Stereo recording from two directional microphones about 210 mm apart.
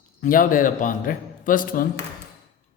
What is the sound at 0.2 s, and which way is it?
A man's voice, 40° left (ahead or behind).